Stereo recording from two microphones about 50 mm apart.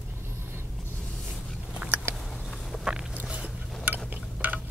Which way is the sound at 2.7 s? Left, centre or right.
Centre.